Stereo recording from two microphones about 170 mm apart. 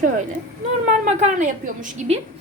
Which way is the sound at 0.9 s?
45° right (ahead or behind).